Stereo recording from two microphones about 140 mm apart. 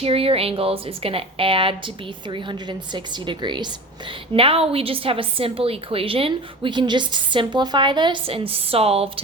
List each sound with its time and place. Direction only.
0.0 s a woman's voice: 45° right (ahead or behind)